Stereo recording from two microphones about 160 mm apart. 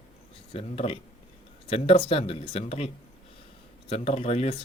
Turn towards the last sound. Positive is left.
turn(degrees=40)  # may be behind; listen again after turning